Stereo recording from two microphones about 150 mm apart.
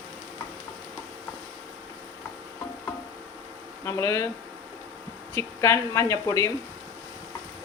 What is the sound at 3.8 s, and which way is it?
Speech, 20° left (ahead or behind).